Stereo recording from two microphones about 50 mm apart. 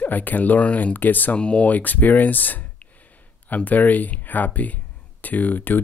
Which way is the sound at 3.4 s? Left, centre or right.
Left.